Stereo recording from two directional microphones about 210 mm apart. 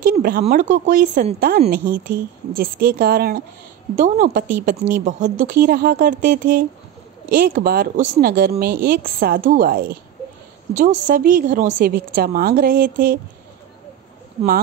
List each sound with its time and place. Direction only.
0.0 s a woman's voice: 45° right (ahead or behind)